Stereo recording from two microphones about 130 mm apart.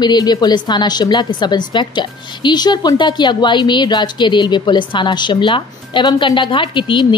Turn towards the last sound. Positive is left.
turn(degrees=40)  # may be behind; listen again after turning